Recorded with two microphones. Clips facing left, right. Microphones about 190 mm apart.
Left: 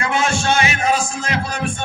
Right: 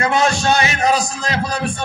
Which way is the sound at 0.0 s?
40° right (ahead or behind).